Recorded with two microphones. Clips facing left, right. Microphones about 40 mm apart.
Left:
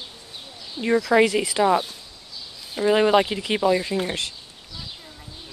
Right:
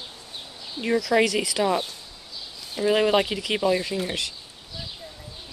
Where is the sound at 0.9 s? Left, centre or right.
Centre.